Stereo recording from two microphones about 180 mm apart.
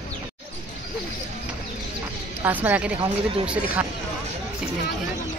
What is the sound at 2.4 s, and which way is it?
Speech, 10° right (ahead or behind).